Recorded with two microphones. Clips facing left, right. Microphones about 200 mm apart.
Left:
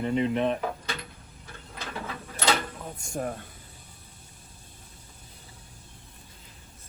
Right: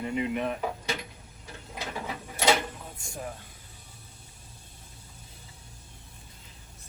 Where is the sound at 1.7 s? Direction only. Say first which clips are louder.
Right 1 dB; 15° right (ahead or behind).